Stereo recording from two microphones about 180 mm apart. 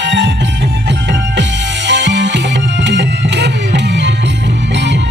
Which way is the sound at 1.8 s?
80° right.